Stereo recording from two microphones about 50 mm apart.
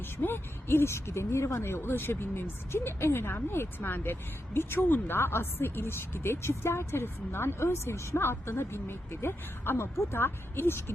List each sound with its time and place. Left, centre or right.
0.2 s speech: left